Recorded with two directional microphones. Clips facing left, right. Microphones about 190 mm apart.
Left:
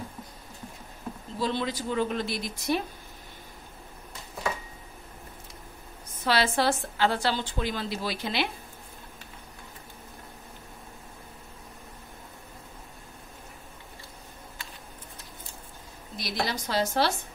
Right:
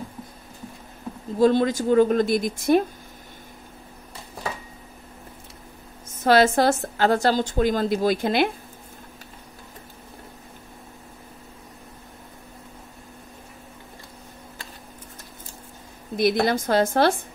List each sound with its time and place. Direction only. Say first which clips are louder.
1.4 s a woman's voice: right 11 dB; 45° right (ahead or behind)
6.1 s a woman's voice: right 8 dB; 45° right (ahead or behind)
16.2 s a woman's voice: right 11 dB; 55° right (ahead or behind)